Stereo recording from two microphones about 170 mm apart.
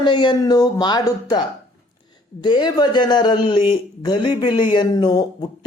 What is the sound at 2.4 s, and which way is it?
Speech, 25° left (ahead or behind).